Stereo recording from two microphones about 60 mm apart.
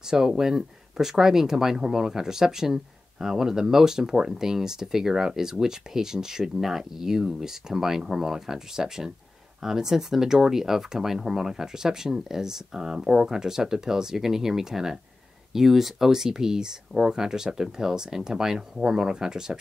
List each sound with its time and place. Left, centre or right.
0.1 s speech: centre